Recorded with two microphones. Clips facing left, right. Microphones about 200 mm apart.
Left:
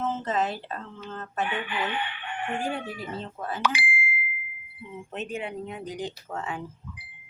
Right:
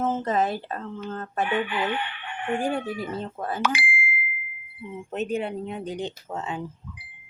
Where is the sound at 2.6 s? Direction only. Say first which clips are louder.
Right 6 dB; 45° right (ahead or behind).